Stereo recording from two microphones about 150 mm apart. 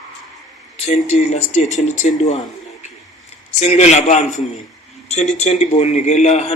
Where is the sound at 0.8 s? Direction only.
45° left (ahead or behind).